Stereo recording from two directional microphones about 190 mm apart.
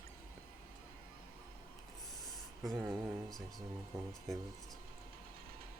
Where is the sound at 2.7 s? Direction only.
10° right (ahead or behind).